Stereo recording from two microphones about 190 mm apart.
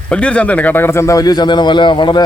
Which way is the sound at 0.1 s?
5° left (ahead or behind).